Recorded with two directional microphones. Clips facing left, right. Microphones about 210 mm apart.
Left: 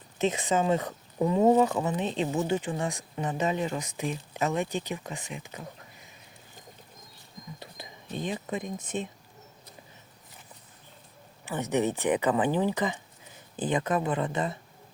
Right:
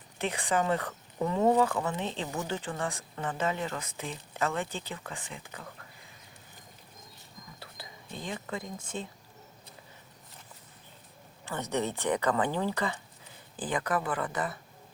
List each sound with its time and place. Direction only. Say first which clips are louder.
0.2 s speech: left 4 dB; 20° left (ahead or behind)
7.8 s a sound: left 2 dB; 20° left (ahead or behind)
8.1 s speech: left 5 dB; 20° left (ahead or behind)
11.4 s speech: left 5 dB; 15° left (ahead or behind)